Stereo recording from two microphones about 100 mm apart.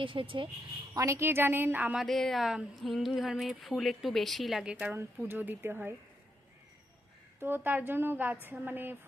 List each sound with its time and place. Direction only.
0.0 s speech: 60° right (ahead or behind)
0.9 s speech: 30° right (ahead or behind); by 2.0 s 10° right (ahead or behind)
2.0 s speech: centre (ahead or behind); by 5.9 s 20° right (ahead or behind)
7.4 s speech: 20° right (ahead or behind)